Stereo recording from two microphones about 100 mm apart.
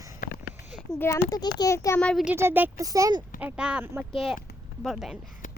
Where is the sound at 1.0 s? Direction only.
30° left (ahead or behind).